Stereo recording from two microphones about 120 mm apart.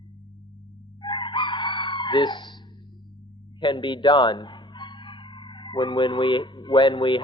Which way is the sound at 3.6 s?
40° left (ahead or behind).